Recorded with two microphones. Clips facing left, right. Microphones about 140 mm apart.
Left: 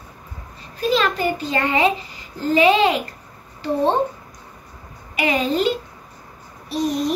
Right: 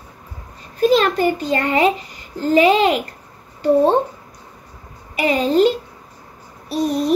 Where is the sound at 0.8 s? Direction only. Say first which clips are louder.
Right 5 dB; 45° right (ahead or behind).